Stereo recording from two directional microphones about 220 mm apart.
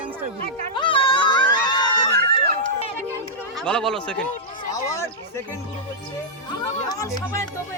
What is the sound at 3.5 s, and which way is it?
Speech, 5° left (ahead or behind).